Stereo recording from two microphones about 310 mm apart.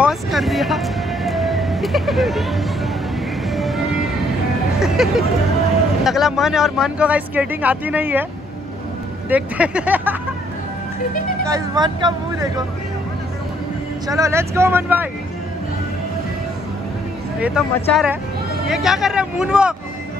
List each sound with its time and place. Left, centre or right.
0.0 s vehicle: centre
4.7 s music: centre
6.0 s speech: centre
9.3 s speech: centre
11.4 s speech: centre
14.0 s speech: centre
17.4 s speech: centre